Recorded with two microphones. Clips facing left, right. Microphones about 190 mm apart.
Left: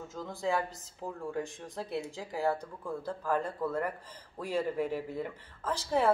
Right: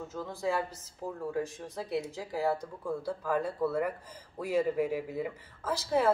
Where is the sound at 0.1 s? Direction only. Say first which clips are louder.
Even; centre (ahead or behind).